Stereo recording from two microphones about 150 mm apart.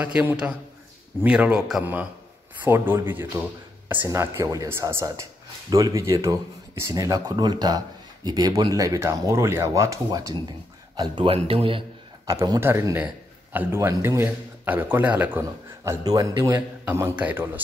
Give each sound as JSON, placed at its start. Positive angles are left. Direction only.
{"t": 0.0, "sound": "a man's voice", "side_deg": -10}
{"t": 12.3, "sound": "a man's voice", "side_deg": -20}
{"t": 16.8, "sound": "a man's voice", "side_deg": -15}